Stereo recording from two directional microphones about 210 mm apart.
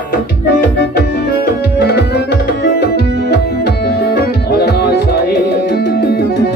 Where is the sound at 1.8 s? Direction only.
50° left (ahead or behind).